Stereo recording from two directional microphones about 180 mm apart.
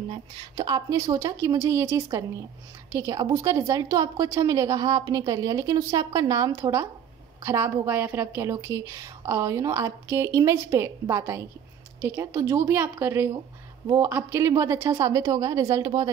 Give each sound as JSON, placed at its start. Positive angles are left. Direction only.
{"t": 0.1, "sound": "a woman's voice", "side_deg": -20}